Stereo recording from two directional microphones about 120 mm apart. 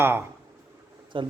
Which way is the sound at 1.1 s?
45° right (ahead or behind).